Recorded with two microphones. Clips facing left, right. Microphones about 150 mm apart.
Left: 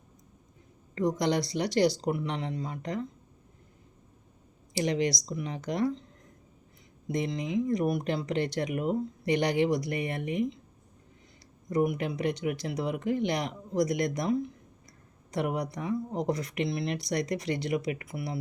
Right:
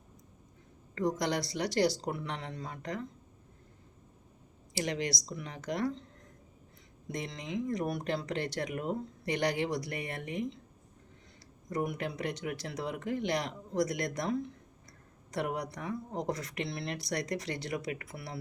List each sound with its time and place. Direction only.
0.9 s speech: 20° left (ahead or behind)
4.7 s speech: 20° left (ahead or behind)
7.1 s speech: 15° left (ahead or behind)
11.7 s speech: 15° left (ahead or behind)